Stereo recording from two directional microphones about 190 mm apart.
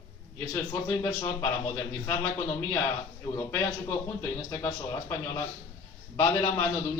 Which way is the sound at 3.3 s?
15° left (ahead or behind).